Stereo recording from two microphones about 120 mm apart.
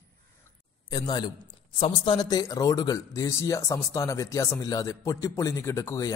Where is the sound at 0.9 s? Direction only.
35° left (ahead or behind).